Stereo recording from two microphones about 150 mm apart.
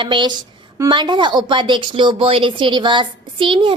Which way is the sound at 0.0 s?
30° right (ahead or behind).